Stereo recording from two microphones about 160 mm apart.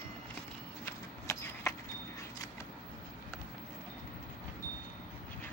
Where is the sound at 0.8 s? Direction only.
15° left (ahead or behind).